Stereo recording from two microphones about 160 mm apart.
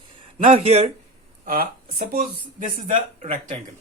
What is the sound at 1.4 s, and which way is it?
Speech, 65° right (ahead or behind).